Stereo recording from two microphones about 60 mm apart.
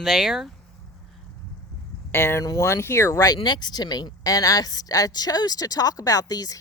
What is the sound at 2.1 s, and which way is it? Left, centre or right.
Speech, left.